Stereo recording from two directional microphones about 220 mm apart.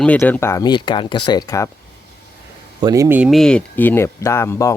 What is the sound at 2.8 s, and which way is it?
Speech, 15° right (ahead or behind).